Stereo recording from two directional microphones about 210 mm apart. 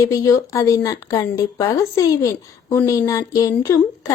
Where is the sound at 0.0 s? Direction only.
15° left (ahead or behind).